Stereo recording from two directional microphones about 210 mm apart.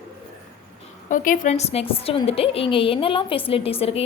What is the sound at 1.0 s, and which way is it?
A woman's voice, 40° left (ahead or behind).